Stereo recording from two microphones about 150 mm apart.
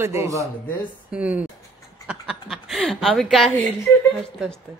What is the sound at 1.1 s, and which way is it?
A woman's voice, 10° right (ahead or behind).